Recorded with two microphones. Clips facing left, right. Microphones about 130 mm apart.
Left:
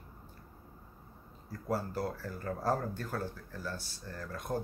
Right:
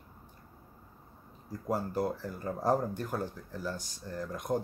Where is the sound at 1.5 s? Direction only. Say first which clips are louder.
Right 2 dB; 15° right (ahead or behind).